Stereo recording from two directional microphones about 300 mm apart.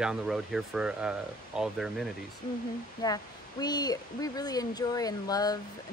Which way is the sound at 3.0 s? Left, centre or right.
Centre.